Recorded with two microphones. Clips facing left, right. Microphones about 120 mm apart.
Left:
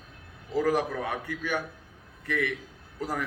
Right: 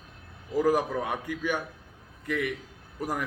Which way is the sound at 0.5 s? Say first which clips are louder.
Right 1 dB; 15° right (ahead or behind).